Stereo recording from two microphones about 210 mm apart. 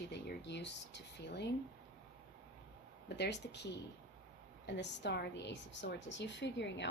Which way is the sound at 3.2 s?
55° left (ahead or behind).